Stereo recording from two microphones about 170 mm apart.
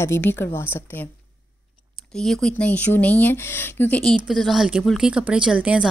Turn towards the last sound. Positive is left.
turn(degrees=-5)  # may be behind; listen again after turning